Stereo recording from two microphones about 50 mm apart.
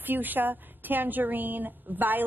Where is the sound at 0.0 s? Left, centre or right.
Right.